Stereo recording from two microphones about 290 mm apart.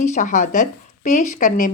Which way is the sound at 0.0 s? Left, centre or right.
Left.